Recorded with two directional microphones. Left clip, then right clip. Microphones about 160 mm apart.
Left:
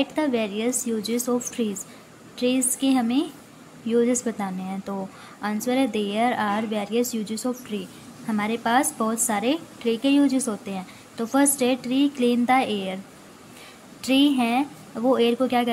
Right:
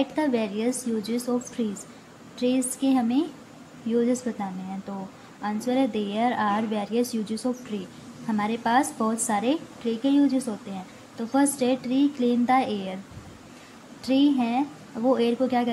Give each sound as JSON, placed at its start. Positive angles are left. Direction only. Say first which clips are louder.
{"t": 0.0, "sound": "a woman's voice", "louder": "left 1 dB", "side_deg": 10}
{"t": 14.0, "sound": "a woman's voice", "louder": "left 2 dB", "side_deg": 15}